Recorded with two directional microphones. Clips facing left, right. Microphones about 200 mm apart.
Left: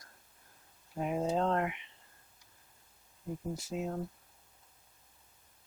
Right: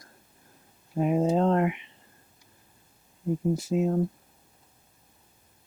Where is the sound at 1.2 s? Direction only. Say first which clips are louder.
Right 5 dB; 15° right (ahead or behind).